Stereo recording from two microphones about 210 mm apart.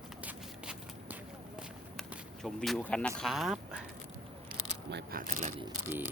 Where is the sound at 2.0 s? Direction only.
Centre (ahead or behind).